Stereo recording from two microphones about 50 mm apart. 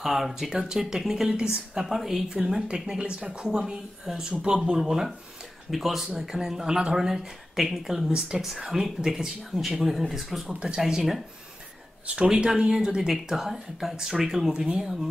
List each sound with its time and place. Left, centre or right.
0.0 s speech: centre
1.3 s speech: centre
1.9 s speech: centre
2.2 s speech: centre
10.5 s speech: centre
12.2 s speech: right